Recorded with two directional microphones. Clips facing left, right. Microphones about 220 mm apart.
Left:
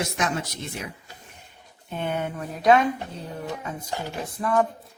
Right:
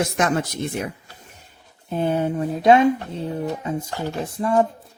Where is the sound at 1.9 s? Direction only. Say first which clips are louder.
Right 7 dB; 35° right (ahead or behind).